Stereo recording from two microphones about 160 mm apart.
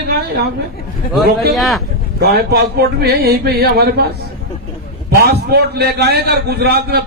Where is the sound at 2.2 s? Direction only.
75° right (ahead or behind).